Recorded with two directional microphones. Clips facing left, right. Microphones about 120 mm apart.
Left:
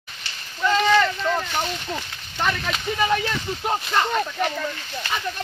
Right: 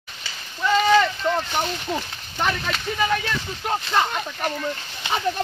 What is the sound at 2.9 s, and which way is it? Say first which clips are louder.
Speech: left 2 dB; 10° left (ahead or behind).